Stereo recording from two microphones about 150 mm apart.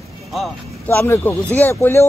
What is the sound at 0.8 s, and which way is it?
Speech, 15° left (ahead or behind).